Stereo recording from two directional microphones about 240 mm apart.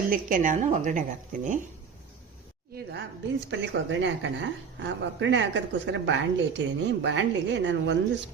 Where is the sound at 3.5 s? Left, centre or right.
Right.